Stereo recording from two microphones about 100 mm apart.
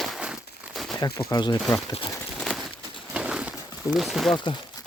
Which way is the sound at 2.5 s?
Centre (ahead or behind).